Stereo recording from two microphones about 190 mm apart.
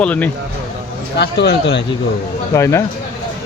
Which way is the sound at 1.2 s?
60° left (ahead or behind).